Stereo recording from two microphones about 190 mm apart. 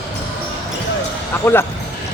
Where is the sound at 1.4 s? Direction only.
10° left (ahead or behind).